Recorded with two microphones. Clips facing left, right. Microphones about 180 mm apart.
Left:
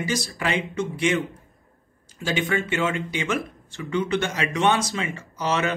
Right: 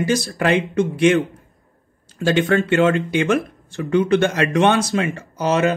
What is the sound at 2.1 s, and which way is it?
Speech, 70° right (ahead or behind).